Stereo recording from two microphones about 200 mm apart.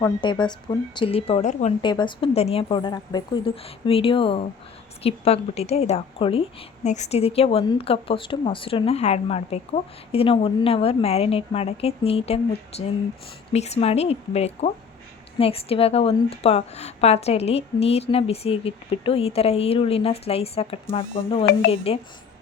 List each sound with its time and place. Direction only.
0.0 s a woman's voice: 20° left (ahead or behind)
1.8 s a woman's voice: 25° left (ahead or behind)